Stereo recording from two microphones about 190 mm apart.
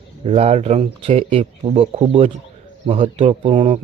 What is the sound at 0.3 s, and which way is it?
Speech, 35° right (ahead or behind).